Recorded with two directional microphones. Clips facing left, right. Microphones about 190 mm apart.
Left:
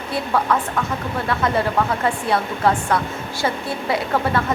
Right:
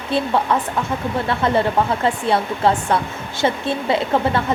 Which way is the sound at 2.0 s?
25° right (ahead or behind).